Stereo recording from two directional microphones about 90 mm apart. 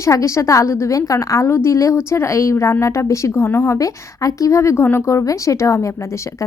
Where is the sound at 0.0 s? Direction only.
35° left (ahead or behind).